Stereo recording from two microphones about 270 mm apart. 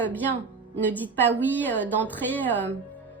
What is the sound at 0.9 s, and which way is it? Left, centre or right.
Speech, centre.